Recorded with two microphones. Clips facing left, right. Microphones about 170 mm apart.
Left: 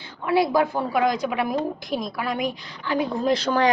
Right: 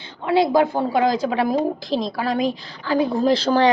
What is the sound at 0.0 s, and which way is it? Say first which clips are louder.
A woman's voice: right 3 dB; 25° right (ahead or behind).